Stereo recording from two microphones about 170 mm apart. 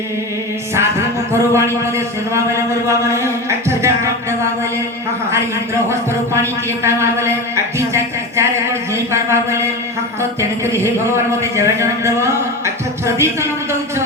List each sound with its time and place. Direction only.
0.8 s a sound: 15° right (ahead or behind)
3.7 s music: 15° right (ahead or behind)
5.9 s speech: 15° right (ahead or behind)
10.7 s speech: 15° right (ahead or behind)